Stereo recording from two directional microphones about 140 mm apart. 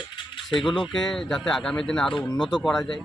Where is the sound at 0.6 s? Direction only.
Centre (ahead or behind).